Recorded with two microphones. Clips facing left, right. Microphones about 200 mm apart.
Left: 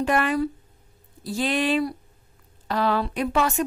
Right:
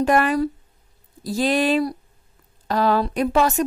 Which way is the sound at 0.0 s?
40° right (ahead or behind).